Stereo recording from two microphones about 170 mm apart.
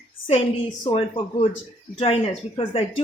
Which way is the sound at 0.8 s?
35° left (ahead or behind).